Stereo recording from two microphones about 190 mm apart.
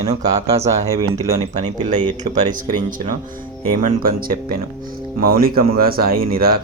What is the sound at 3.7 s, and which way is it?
Speech, 45° right (ahead or behind).